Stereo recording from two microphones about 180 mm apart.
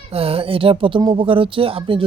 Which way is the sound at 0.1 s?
30° right (ahead or behind).